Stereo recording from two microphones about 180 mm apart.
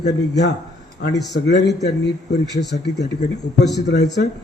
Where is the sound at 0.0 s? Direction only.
70° left (ahead or behind).